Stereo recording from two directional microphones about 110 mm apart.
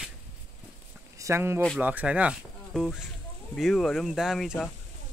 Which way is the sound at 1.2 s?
25° right (ahead or behind).